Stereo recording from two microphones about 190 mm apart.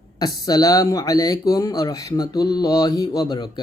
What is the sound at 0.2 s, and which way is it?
Speech, 20° left (ahead or behind).